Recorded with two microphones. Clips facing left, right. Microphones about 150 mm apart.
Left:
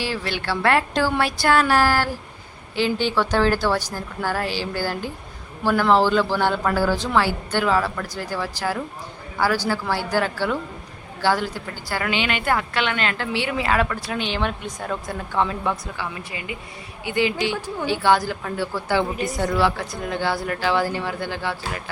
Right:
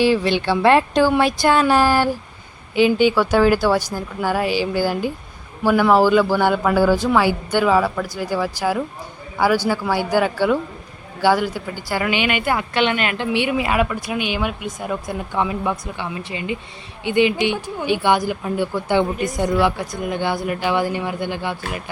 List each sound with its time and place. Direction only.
0.0 s a woman's voice: 20° right (ahead or behind)